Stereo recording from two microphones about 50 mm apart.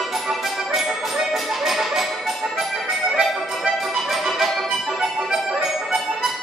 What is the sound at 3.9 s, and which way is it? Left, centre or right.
Music, centre.